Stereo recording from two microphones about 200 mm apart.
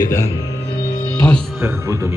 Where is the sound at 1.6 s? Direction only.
15° right (ahead or behind).